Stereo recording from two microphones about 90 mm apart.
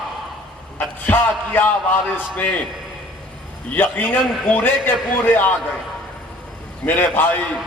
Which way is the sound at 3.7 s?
20° left (ahead or behind).